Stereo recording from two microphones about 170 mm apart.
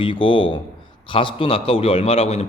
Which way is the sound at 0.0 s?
30° left (ahead or behind).